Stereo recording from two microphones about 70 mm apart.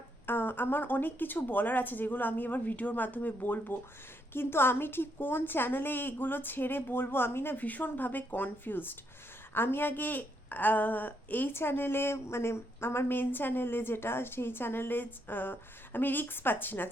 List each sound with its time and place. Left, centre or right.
0.3 s a woman's voice: left